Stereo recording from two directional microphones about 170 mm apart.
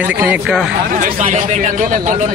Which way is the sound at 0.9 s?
50° right (ahead or behind).